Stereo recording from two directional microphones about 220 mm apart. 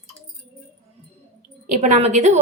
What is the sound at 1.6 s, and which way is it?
Speech, 35° right (ahead or behind).